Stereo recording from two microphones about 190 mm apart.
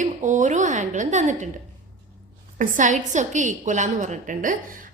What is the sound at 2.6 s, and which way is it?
A woman's voice, 40° right (ahead or behind).